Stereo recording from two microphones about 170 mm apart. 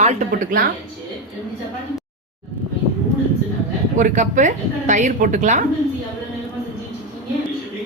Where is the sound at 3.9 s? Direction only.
45° right (ahead or behind).